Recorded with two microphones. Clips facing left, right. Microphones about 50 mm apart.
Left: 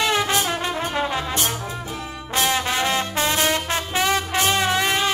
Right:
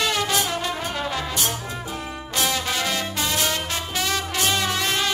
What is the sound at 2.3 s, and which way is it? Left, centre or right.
Music, left.